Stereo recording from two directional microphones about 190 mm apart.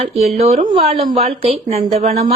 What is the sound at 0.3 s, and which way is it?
A woman's voice, 35° right (ahead or behind).